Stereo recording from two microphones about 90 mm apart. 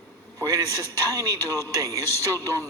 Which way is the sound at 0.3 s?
40° right (ahead or behind).